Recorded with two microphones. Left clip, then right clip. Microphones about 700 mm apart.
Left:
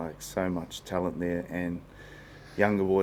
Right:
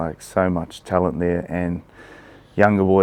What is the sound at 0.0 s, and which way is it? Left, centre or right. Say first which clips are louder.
Speech: right 11 dB; right.